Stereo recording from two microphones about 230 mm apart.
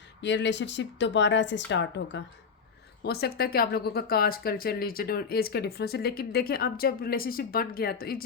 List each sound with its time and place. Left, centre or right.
0.2 s speech: left